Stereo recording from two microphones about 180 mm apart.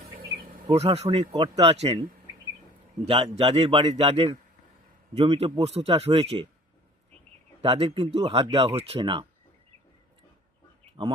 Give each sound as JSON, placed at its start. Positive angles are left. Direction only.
{"t": 0.7, "sound": "speech", "side_deg": -35}
{"t": 1.3, "sound": "speech", "side_deg": -20}
{"t": 1.6, "sound": "speech", "side_deg": -35}
{"t": 3.1, "sound": "speech", "side_deg": -30}
{"t": 7.6, "sound": "speech", "side_deg": -30}